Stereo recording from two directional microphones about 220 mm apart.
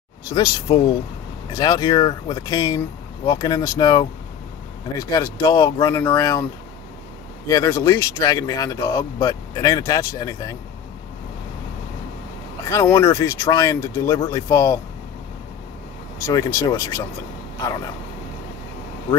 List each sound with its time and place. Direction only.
0.3 s speech: 20° left (ahead or behind)
7.4 s speech: 15° left (ahead or behind)
12.6 s speech: 15° left (ahead or behind)
16.3 s speech: 15° left (ahead or behind)